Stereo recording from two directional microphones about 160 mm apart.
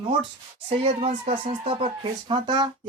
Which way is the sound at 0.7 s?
40° right (ahead or behind).